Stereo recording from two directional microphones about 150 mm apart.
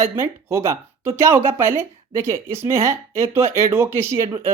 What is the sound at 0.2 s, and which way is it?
Speech, 15° right (ahead or behind).